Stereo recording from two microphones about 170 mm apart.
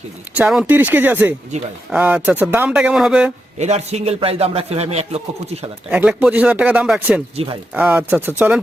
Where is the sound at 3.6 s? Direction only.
40° right (ahead or behind).